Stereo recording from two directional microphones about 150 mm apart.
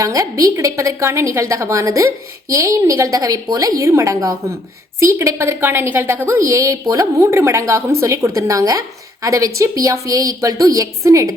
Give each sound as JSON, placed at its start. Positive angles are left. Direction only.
{"t": 0.0, "sound": "a woman's voice", "side_deg": -20}